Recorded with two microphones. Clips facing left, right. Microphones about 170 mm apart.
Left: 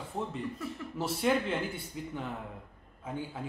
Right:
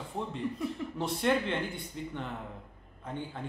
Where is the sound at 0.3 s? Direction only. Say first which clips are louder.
Right 3 dB; 5° left (ahead or behind).